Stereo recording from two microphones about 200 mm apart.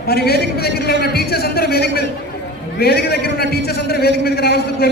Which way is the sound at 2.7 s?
50° left (ahead or behind).